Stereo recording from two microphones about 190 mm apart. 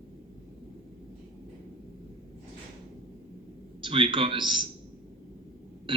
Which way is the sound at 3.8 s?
25° right (ahead or behind).